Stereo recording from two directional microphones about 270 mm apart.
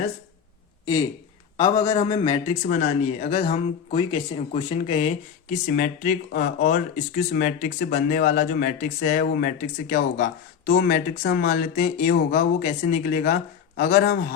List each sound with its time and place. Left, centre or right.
1.5 s a man's voice: centre
2.6 s speech: left
3.9 s speech: centre